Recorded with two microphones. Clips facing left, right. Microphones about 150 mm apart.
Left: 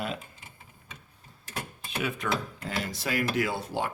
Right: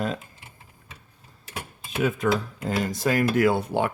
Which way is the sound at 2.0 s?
45° right (ahead or behind).